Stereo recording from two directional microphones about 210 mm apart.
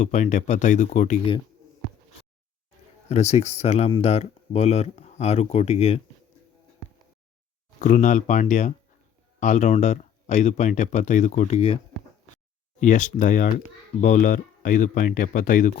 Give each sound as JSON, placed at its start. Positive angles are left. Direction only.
{"t": 0.0, "sound": "speech", "side_deg": 35}
{"t": 3.1, "sound": "speech", "side_deg": 30}
{"t": 7.8, "sound": "speech", "side_deg": 40}
{"t": 12.8, "sound": "speech", "side_deg": 35}